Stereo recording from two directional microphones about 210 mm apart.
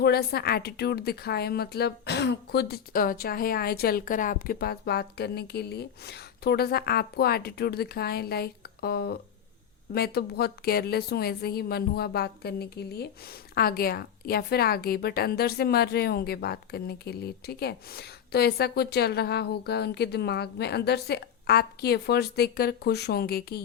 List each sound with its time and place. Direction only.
0.0 s speech: 50° left (ahead or behind)